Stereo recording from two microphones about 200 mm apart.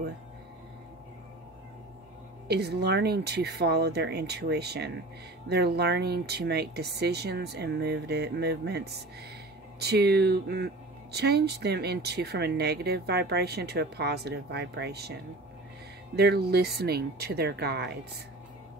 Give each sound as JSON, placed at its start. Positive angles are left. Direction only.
{"t": 2.4, "sound": "speech", "side_deg": -55}
{"t": 16.2, "sound": "speech", "side_deg": -55}